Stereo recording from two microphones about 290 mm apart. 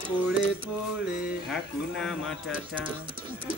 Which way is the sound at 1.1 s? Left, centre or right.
Centre.